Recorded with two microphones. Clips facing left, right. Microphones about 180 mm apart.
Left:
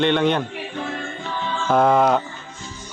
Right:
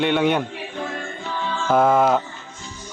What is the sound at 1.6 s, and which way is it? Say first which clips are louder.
Speech: even; centre (ahead or behind).